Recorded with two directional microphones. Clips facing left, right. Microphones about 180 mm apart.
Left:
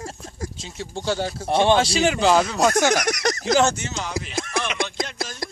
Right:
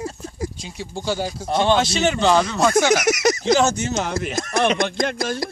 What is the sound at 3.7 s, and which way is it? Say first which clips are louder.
Speech: right 5 dB; 40° right (ahead or behind).